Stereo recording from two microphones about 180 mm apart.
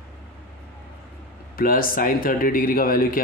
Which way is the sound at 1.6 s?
55° left (ahead or behind).